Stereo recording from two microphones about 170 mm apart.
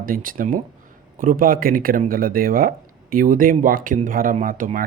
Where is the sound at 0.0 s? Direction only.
55° right (ahead or behind).